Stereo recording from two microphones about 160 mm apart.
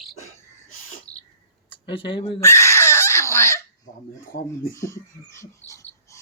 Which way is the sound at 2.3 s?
15° left (ahead or behind).